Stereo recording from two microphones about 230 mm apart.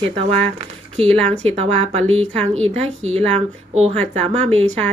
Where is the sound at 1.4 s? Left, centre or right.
Right.